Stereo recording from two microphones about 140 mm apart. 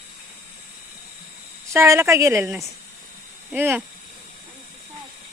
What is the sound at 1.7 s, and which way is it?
Speech, 20° right (ahead or behind).